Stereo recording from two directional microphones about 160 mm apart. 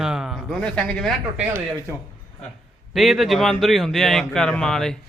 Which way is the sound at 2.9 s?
Centre (ahead or behind).